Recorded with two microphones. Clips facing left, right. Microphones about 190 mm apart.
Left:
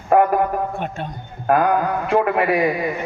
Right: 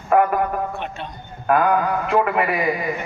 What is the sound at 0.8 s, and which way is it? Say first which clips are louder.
Speech: left 3 dB; 45° left (ahead or behind).